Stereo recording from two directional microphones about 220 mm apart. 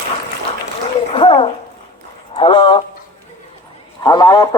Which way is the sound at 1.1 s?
25° left (ahead or behind).